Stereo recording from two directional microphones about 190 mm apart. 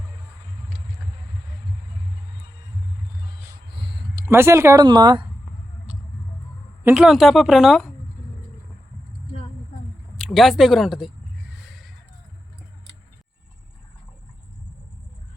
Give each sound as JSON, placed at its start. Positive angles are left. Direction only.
{"t": 3.8, "sound": "speech", "side_deg": -25}
{"t": 6.8, "sound": "speech", "side_deg": -5}
{"t": 10.2, "sound": "speech", "side_deg": 0}